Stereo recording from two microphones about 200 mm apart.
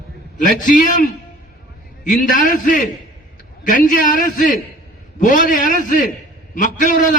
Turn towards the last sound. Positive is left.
turn(degrees=40)  # may be behind; listen again after turning